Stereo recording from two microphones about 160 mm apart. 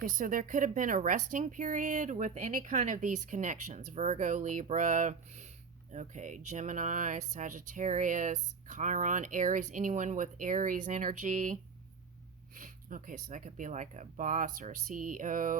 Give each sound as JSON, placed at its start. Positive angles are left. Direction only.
{"t": 0.0, "sound": "speech", "side_deg": -60}